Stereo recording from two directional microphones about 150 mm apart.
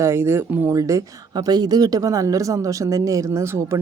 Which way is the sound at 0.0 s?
15° right (ahead or behind).